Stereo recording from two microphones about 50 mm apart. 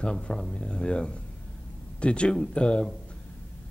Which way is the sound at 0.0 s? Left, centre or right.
Centre.